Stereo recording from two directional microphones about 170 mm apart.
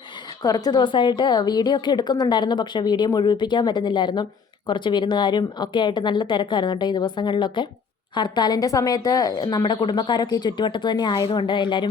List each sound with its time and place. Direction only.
0.4 s a woman's voice: 20° left (ahead or behind)